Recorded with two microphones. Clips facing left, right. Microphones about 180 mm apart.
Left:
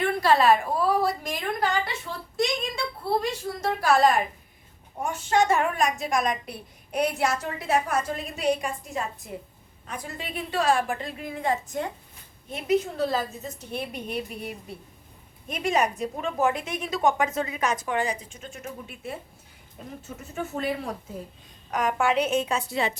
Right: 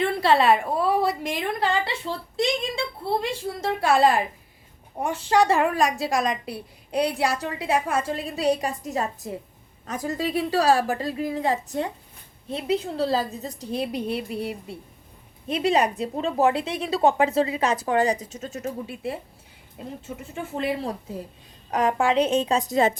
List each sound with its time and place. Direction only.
0.0 s a woman's voice: 25° right (ahead or behind); by 23.0 s 45° right (ahead or behind)